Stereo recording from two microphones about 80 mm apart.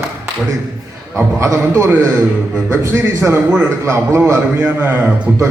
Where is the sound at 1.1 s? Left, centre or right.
Right.